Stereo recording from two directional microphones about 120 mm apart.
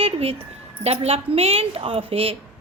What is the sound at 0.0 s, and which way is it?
A woman's voice, 50° right (ahead or behind).